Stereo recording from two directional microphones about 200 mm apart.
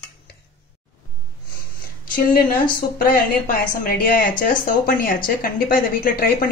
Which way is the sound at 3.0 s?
45° left (ahead or behind).